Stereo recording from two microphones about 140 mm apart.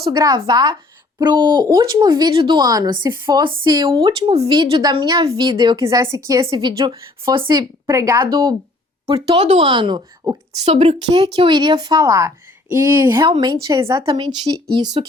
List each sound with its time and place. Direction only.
0.1 s a woman's voice: 25° right (ahead or behind)
9.3 s a woman's voice: 40° right (ahead or behind); by 10.4 s 25° right (ahead or behind)
10.7 s a woman's voice: 50° right (ahead or behind)
11.3 s a woman's voice: 30° right (ahead or behind)
13.9 s speech: 35° right (ahead or behind)